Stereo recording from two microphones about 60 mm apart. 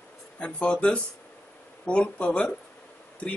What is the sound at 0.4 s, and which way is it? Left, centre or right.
Speech, centre.